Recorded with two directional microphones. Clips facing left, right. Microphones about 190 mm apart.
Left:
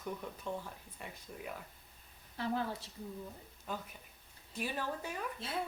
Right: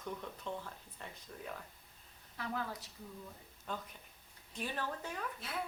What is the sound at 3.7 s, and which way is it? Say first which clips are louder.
Speech: left 1 dB; 5° left (ahead or behind).